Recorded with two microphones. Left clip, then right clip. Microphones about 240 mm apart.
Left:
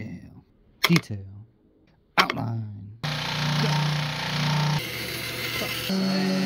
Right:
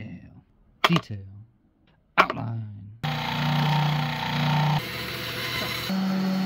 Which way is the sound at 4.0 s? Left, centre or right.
Right.